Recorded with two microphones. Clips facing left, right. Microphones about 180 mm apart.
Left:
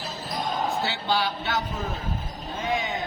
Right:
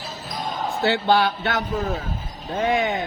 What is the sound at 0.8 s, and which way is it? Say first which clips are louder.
Speech: right 7 dB; 60° right (ahead or behind).